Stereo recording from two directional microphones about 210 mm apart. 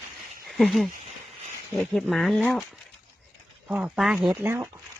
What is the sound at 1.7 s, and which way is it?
Speech, centre (ahead or behind).